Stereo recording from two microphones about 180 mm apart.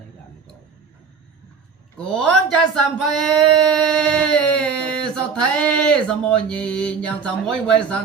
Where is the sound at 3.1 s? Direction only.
5° left (ahead or behind).